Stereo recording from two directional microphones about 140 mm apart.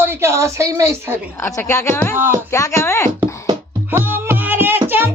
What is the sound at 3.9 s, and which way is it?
Music, 15° right (ahead or behind).